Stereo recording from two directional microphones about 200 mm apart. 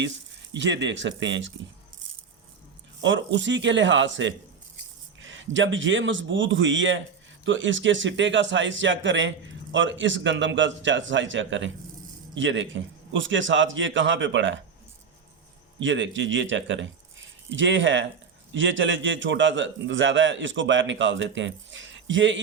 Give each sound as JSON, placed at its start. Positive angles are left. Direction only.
{"t": 0.5, "sound": "speech", "side_deg": -65}
{"t": 3.0, "sound": "a man's voice", "side_deg": -65}
{"t": 15.8, "sound": "a man's voice", "side_deg": -70}